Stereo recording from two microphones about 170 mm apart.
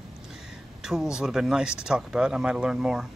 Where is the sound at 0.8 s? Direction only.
5° right (ahead or behind).